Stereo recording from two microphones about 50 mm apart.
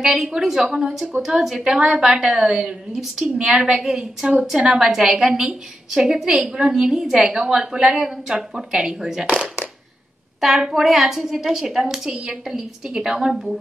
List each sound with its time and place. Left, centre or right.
0.0 s a woman's voice: centre
10.4 s a woman's voice: centre